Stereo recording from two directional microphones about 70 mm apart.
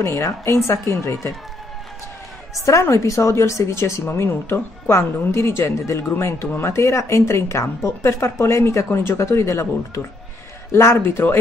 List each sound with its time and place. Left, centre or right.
0.0 s a woman's voice: left
2.6 s a woman's voice: left